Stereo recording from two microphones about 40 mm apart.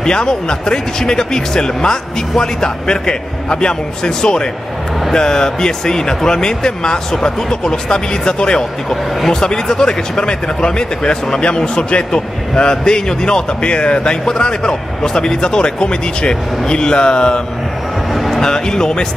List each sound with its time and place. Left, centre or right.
0.0 s speech: centre
14.2 s speech: centre
18.1 s vehicle: centre
18.4 s speech: centre